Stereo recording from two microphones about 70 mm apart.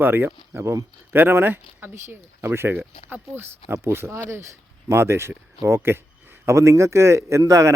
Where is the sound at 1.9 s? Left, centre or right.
Right.